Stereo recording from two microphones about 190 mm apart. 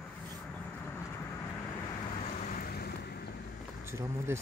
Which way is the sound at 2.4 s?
50° left (ahead or behind).